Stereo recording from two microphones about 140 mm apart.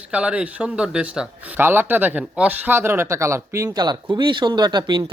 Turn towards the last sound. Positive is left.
turn(degrees=-30)  # may be behind; listen again after turning